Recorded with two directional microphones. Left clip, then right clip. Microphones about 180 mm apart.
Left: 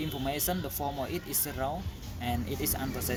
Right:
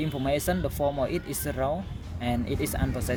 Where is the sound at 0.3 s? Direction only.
55° right (ahead or behind).